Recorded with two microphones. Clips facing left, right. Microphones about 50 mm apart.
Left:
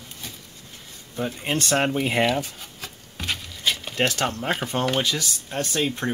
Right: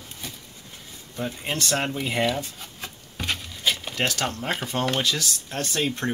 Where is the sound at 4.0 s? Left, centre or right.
Centre.